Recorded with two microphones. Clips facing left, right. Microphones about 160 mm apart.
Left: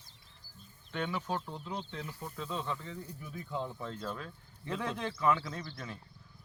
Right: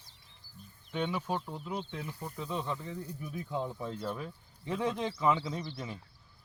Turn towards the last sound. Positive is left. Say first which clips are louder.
# right 4 dB
turn(degrees=-15)  # may be behind; listen again after turning